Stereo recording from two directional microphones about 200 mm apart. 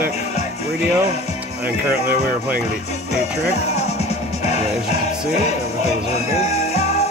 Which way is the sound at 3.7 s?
35° left (ahead or behind).